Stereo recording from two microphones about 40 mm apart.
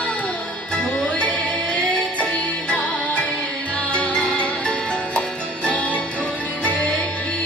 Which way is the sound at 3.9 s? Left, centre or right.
Left.